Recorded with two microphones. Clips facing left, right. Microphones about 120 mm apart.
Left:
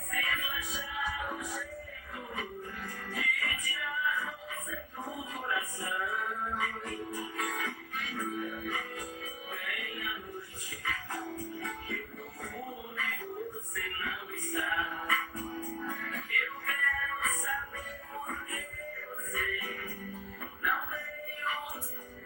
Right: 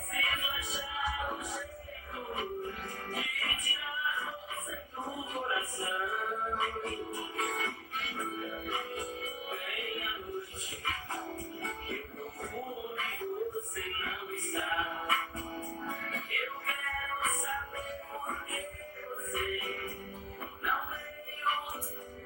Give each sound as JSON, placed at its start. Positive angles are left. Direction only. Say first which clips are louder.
{"t": 0.1, "sound": "music", "louder": "left 1 dB", "side_deg": -20}
{"t": 13.0, "sound": "a sound", "louder": "even", "side_deg": -20}
{"t": 13.7, "sound": "music", "louder": "even", "side_deg": -20}
{"t": 19.3, "sound": "music", "louder": "right 2 dB", "side_deg": -20}